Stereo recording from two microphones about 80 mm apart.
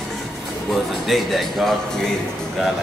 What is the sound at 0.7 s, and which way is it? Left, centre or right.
Speech, centre.